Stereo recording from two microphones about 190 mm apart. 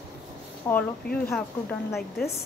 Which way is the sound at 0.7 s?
10° left (ahead or behind).